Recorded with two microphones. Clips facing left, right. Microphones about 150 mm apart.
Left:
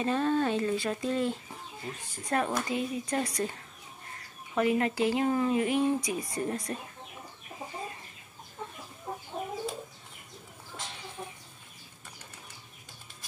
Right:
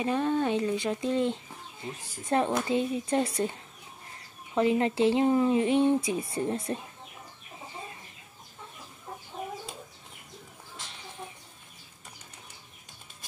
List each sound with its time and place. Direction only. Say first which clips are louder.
0.0 s speech: even; 15° right (ahead or behind)
4.6 s speech: right 2 dB; 25° right (ahead or behind)